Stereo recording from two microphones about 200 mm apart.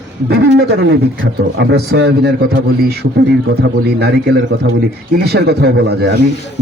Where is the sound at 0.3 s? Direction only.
60° right (ahead or behind).